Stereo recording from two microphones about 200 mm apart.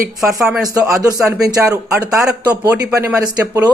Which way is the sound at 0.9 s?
15° right (ahead or behind).